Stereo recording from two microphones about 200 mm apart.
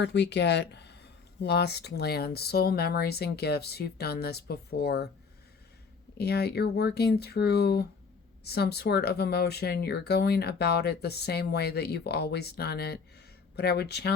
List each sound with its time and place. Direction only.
0.0 s speech: 60° left (ahead or behind)
6.1 s speech: 55° left (ahead or behind)